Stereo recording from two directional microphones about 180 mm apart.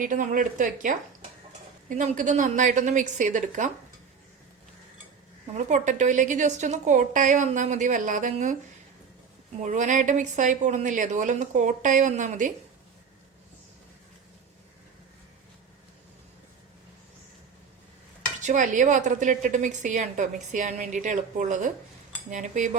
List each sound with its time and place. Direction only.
0.0 s a woman's voice: 45° right (ahead or behind)
5.6 s a woman's voice: 45° right (ahead or behind)
9.6 s a woman's voice: 45° right (ahead or behind)
18.4 s a woman's voice: 45° right (ahead or behind)